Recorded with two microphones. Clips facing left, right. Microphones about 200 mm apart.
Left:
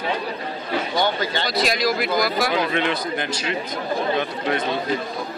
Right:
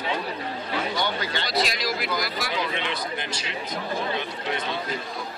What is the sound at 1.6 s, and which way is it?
A man's voice, 50° left (ahead or behind).